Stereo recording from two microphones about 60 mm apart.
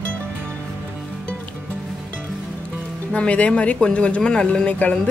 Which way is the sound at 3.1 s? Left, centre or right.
Centre.